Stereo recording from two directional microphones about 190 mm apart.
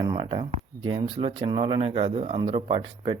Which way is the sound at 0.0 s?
25° right (ahead or behind).